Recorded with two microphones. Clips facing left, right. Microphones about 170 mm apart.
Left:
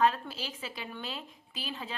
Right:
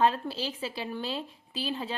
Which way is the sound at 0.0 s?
30° right (ahead or behind).